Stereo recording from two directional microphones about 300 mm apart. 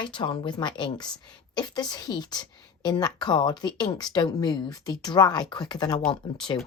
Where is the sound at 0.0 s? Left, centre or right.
Centre.